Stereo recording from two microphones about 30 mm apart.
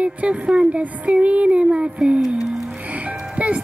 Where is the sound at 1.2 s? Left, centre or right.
Right.